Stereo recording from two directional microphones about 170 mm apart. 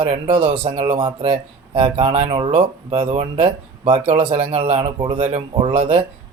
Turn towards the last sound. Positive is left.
turn(degrees=-30)  # may be behind; listen again after turning